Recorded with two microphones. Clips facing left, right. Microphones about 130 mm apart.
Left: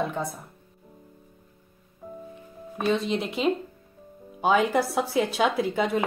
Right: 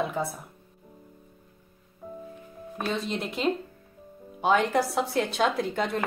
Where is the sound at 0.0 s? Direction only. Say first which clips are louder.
Even; centre (ahead or behind).